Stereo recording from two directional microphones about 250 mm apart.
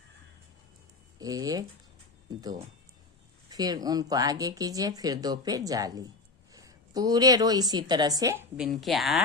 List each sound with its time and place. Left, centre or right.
1.2 s a woman's voice: centre